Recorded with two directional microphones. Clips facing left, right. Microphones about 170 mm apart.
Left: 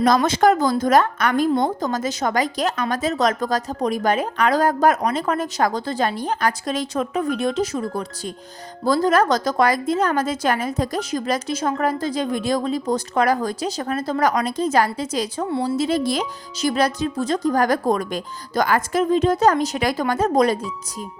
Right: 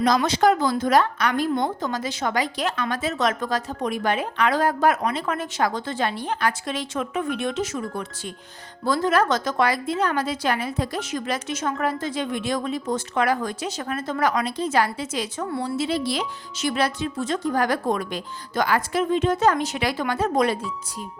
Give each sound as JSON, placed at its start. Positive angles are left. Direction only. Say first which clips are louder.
{"t": 0.0, "sound": "a woman's voice", "louder": "left 3 dB", "side_deg": 50}